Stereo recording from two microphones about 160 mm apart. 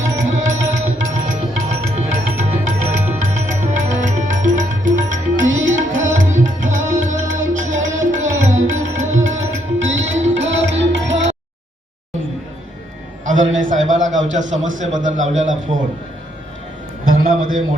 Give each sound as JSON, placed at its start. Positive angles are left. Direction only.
{"t": 0.2, "sound": "music", "side_deg": -50}
{"t": 10.5, "sound": "music", "side_deg": -90}
{"t": 13.2, "sound": "a sound", "side_deg": -50}
{"t": 17.2, "sound": "a man's voice", "side_deg": -65}